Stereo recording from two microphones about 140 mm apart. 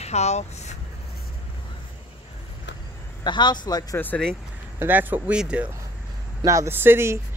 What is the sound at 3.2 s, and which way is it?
Speech, 30° left (ahead or behind).